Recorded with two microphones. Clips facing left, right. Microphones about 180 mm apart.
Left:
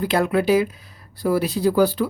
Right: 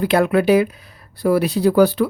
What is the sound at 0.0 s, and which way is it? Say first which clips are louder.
Speech: right 4 dB; 65° right (ahead or behind).